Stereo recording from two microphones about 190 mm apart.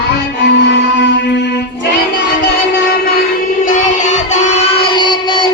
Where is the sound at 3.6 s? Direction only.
40° left (ahead or behind).